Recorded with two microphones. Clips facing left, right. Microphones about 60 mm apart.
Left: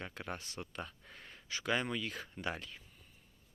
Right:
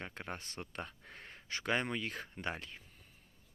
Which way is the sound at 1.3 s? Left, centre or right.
Right.